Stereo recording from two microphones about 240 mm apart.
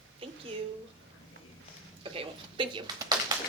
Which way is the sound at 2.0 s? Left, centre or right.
Right.